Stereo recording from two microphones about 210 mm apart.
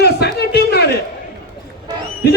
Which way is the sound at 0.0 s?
50° left (ahead or behind).